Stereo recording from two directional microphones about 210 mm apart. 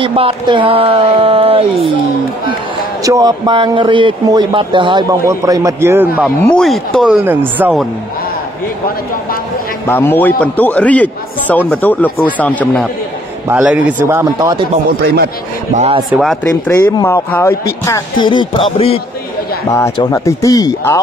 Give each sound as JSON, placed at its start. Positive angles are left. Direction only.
{"t": 0.0, "sound": "speech", "side_deg": -25}
{"t": 3.0, "sound": "a man's voice", "side_deg": -15}
{"t": 6.4, "sound": "speech", "side_deg": 0}
{"t": 9.8, "sound": "a man's voice", "side_deg": 10}
{"t": 13.5, "sound": "a man's voice", "side_deg": -10}
{"t": 15.7, "sound": "speech", "side_deg": -30}
{"t": 16.1, "sound": "speech", "side_deg": 0}
{"t": 16.4, "sound": "a man's voice", "side_deg": 10}
{"t": 19.7, "sound": "a man's voice", "side_deg": 15}